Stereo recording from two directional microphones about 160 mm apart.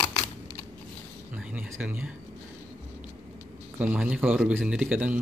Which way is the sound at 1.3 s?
10° right (ahead or behind).